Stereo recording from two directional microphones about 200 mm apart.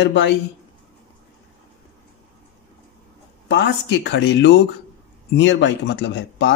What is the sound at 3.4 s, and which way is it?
Speech, 60° left (ahead or behind).